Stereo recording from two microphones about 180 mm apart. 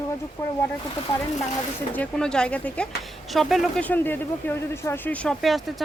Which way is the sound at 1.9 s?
5° left (ahead or behind).